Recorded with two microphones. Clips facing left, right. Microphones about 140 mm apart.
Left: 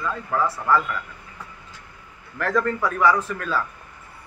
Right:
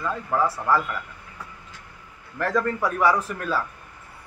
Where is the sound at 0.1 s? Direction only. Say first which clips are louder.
Right 2 dB; 25° right (ahead or behind).